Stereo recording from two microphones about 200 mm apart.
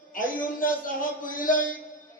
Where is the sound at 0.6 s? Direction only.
45° left (ahead or behind).